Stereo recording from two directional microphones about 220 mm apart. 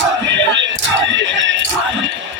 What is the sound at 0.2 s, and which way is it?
Music, 55° right (ahead or behind).